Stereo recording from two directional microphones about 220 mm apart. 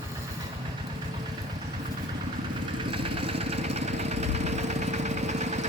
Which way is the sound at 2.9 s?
25° right (ahead or behind).